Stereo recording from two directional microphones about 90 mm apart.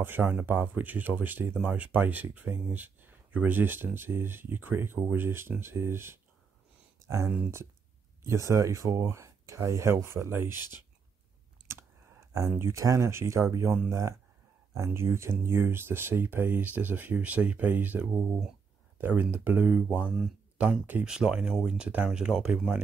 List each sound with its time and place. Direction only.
0.0 s speech: 20° right (ahead or behind)
12.4 s speech: 30° right (ahead or behind); by 22.8 s 10° right (ahead or behind)